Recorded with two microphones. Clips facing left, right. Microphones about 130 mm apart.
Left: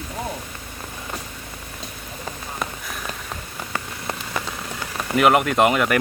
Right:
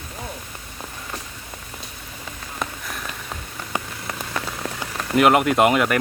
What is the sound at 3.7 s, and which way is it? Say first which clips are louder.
Rain on surface: right 2 dB; 15° right (ahead or behind).